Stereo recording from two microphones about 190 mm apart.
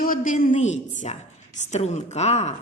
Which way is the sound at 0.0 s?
45° left (ahead or behind).